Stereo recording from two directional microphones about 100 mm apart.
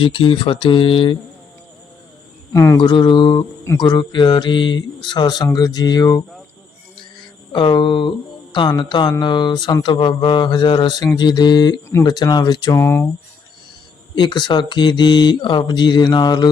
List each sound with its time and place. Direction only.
0.0 s speech: 60° left (ahead or behind)
2.5 s speech: 30° left (ahead or behind)
2.7 s speech: 50° left (ahead or behind)
7.5 s speech: 55° left (ahead or behind)
12.7 s speech: 25° left (ahead or behind)
14.2 s speech: 50° left (ahead or behind)